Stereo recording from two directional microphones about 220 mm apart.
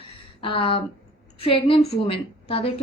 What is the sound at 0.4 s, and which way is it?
A woman's voice, 25° left (ahead or behind).